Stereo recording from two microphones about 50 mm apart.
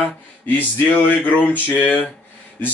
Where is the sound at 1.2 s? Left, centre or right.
Left.